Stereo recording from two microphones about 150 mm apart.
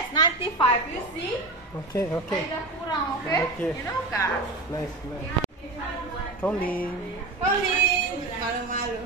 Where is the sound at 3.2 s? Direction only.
15° left (ahead or behind).